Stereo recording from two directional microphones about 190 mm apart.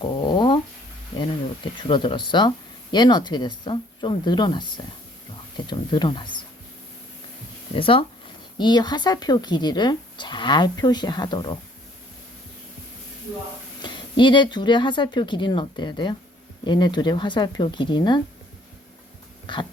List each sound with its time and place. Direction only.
0.0 s a sound: 25° left (ahead or behind)
1.9 s speech: 25° left (ahead or behind)
7.7 s speech: 30° left (ahead or behind)
13.8 s speech: 25° left (ahead or behind)
19.5 s speech: 25° left (ahead or behind)